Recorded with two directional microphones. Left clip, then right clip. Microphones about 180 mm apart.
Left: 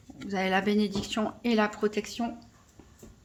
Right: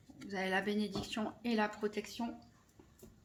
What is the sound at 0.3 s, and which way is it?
Speech, 30° left (ahead or behind).